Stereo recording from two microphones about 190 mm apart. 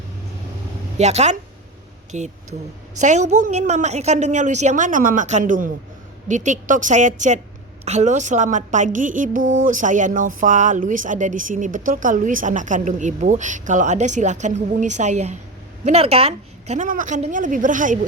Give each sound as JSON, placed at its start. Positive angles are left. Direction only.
{"t": 0.9, "sound": "speech", "side_deg": -35}